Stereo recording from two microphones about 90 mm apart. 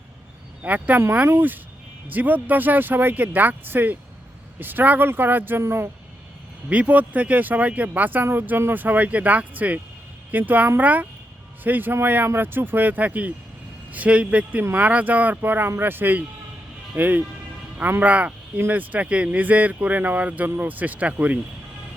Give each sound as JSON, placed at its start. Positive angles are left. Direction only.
{"t": 0.6, "sound": "speech", "side_deg": -20}
{"t": 6.7, "sound": "speech", "side_deg": -15}